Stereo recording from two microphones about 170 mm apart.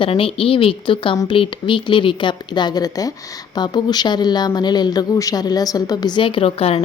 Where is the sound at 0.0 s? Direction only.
35° left (ahead or behind).